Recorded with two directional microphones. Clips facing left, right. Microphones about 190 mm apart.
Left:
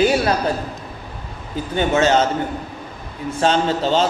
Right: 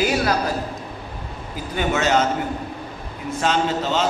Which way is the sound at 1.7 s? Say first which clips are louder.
Left 4 dB; 30° left (ahead or behind).